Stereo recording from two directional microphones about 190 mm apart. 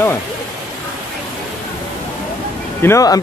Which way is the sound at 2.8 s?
15° left (ahead or behind).